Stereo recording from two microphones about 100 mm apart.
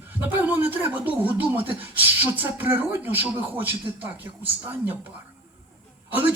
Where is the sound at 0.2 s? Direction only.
20° right (ahead or behind).